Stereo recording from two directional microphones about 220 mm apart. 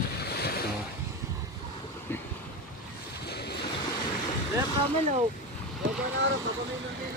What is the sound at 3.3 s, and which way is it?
Waves, 50° left (ahead or behind).